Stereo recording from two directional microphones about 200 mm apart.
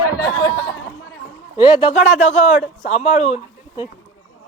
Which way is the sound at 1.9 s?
40° left (ahead or behind).